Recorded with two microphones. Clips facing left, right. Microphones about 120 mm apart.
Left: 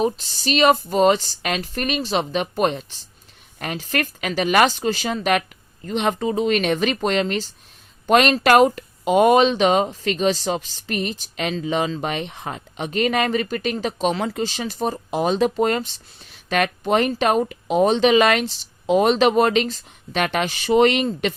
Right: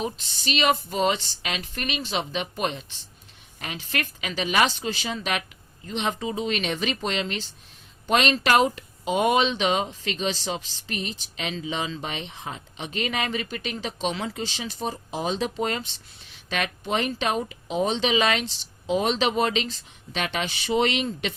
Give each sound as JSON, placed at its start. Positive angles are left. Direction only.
{"t": 0.0, "sound": "speech", "side_deg": 45}